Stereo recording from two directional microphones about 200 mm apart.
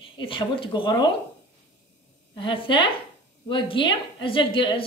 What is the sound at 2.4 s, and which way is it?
A woman's voice, 25° left (ahead or behind).